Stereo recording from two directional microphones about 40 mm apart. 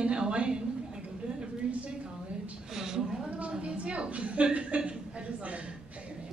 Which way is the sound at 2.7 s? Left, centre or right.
Centre.